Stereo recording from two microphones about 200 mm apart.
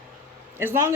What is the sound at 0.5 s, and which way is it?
Speech, 10° right (ahead or behind).